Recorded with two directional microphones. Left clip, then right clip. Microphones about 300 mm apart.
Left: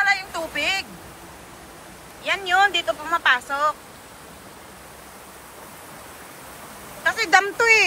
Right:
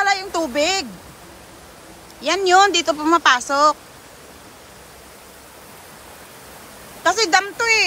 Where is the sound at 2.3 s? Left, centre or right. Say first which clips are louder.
Right 5 dB; centre.